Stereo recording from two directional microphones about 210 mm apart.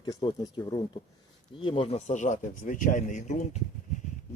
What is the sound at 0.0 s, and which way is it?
Speech, 20° left (ahead or behind).